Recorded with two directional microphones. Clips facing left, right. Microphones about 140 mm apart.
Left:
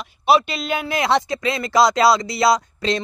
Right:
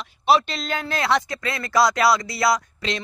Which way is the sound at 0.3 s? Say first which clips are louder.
Left 2 dB; 5° left (ahead or behind).